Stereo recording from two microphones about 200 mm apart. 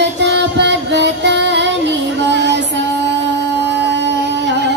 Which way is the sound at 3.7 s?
60° right (ahead or behind).